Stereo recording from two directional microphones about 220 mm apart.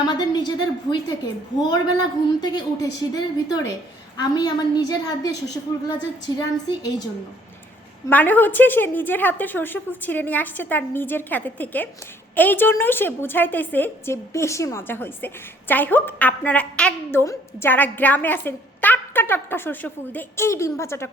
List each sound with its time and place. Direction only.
0.0 s a woman's voice: 20° left (ahead or behind)
8.1 s a woman's voice: 5° left (ahead or behind)